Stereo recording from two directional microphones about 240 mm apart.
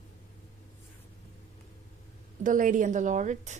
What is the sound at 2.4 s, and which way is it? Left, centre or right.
A woman's voice, right.